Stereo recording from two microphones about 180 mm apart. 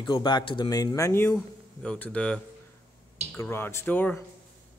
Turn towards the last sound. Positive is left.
turn(degrees=10)  # may be behind; listen again after turning